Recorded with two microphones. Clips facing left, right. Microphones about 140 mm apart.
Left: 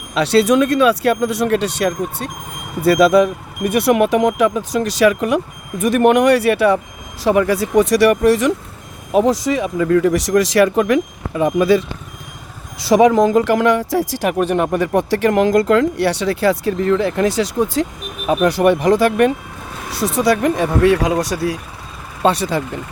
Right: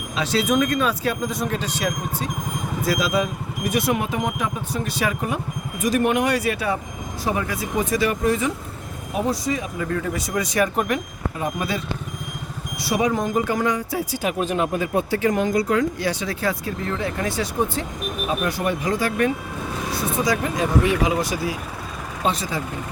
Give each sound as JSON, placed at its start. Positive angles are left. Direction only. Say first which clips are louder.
{"t": 0.1, "sound": "speech", "louder": "left 8 dB", "side_deg": 70}
{"t": 5.8, "sound": "speech", "louder": "left 8 dB", "side_deg": 60}
{"t": 7.3, "sound": "speech", "louder": "left 10 dB", "side_deg": 90}
{"t": 9.1, "sound": "speech", "louder": "left 9 dB", "side_deg": 90}
{"t": 12.9, "sound": "speech", "louder": "left 10 dB", "side_deg": 90}
{"t": 18.3, "sound": "speech", "louder": "left 11 dB", "side_deg": 75}